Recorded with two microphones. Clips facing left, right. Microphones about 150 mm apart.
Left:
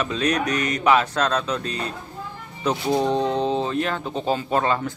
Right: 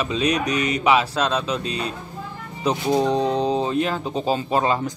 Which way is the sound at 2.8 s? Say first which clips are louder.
Right 1 dB; centre (ahead or behind).